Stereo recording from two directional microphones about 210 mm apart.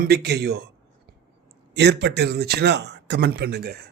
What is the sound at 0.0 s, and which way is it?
Speech, 50° right (ahead or behind).